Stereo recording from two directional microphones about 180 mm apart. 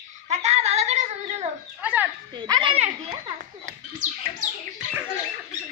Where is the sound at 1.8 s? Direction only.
10° right (ahead or behind).